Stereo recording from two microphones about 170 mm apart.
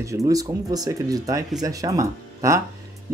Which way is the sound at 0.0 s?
20° right (ahead or behind).